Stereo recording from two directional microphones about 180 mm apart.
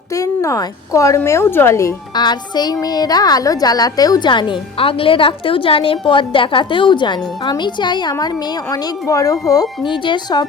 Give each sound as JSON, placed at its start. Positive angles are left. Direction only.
{"t": 0.2, "sound": "a woman's voice", "side_deg": 15}